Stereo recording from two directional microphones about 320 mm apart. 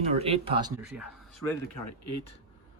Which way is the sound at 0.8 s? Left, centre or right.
Centre.